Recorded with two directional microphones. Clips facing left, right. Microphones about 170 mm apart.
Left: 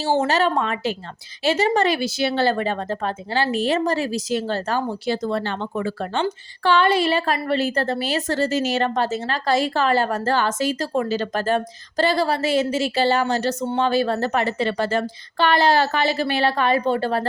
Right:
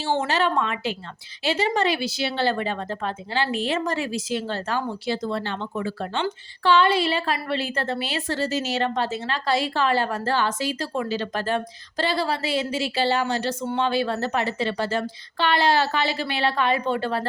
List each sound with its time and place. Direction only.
0.0 s a woman's voice: 40° left (ahead or behind)